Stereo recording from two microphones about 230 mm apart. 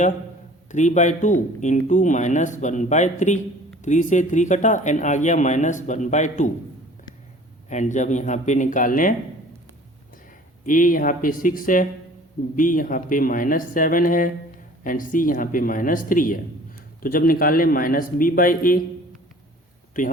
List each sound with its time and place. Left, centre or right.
0.7 s speech: left
7.7 s speech: left
10.7 s speech: left
20.0 s speech: left